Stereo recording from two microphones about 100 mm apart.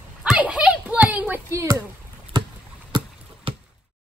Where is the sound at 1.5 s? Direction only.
30° right (ahead or behind).